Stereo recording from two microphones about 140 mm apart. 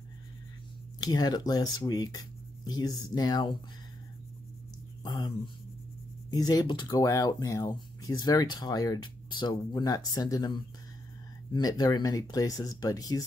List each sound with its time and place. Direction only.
1.0 s speech: 30° left (ahead or behind)
5.0 s speech: 30° left (ahead or behind)
6.3 s speech: 25° left (ahead or behind)